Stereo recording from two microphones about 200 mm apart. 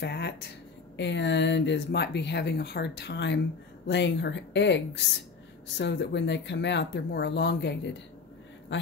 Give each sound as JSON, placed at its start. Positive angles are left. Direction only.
{"t": 0.0, "sound": "speech", "side_deg": 55}